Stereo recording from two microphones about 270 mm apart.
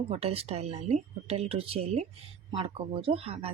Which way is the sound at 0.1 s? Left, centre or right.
Right.